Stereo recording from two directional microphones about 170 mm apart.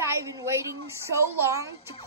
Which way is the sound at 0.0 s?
15° right (ahead or behind).